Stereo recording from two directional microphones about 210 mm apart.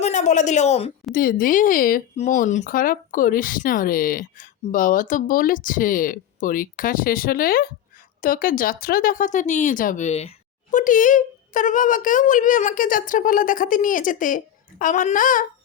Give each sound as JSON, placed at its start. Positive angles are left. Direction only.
{"t": 0.0, "sound": "speech", "side_deg": 35}
{"t": 1.1, "sound": "speech", "side_deg": 45}